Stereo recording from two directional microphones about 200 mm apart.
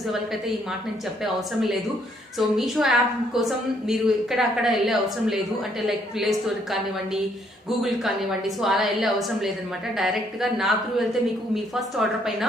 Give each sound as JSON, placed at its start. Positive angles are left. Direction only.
{"t": 1.2, "sound": "a woman's voice", "side_deg": 0}
{"t": 7.8, "sound": "a woman's voice", "side_deg": 0}